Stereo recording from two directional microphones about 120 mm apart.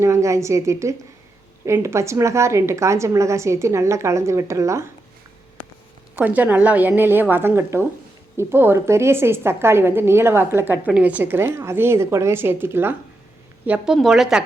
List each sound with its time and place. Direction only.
0.0 s a woman's voice: 25° right (ahead or behind)
6.1 s a woman's voice: 15° right (ahead or behind)
13.7 s speech: 10° right (ahead or behind)